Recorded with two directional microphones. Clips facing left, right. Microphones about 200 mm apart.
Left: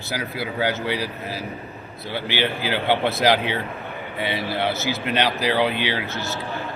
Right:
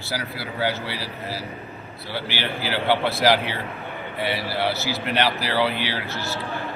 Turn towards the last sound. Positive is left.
turn(degrees=20)  # may be behind; listen again after turning